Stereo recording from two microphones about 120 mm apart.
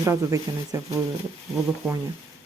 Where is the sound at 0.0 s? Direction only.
25° right (ahead or behind).